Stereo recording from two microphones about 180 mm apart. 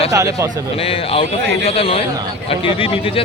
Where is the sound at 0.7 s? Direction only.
30° left (ahead or behind).